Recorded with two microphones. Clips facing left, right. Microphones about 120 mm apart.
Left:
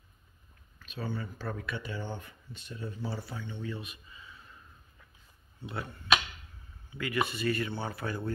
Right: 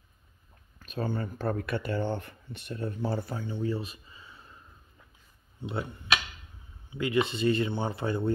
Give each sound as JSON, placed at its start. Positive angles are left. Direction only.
{"t": 0.7, "sound": "speech", "side_deg": -45}
{"t": 3.4, "sound": "speech", "side_deg": -35}
{"t": 5.6, "sound": "speech", "side_deg": -25}
{"t": 6.9, "sound": "speech", "side_deg": -25}